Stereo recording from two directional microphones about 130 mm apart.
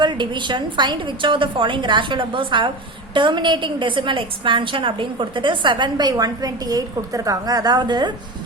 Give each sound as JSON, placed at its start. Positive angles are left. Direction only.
{"t": 0.0, "sound": "a woman's voice", "side_deg": -35}